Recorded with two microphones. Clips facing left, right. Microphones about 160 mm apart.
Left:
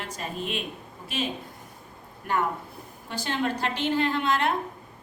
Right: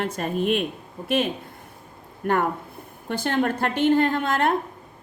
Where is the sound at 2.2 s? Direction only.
50° right (ahead or behind).